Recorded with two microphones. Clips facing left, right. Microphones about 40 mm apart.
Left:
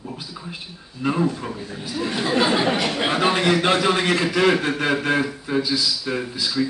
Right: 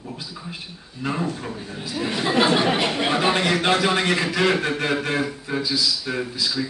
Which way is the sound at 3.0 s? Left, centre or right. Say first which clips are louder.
Even; centre.